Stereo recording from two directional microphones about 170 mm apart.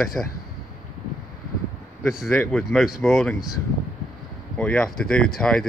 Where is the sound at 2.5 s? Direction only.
Centre (ahead or behind).